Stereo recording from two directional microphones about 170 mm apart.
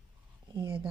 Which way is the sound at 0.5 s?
30° right (ahead or behind).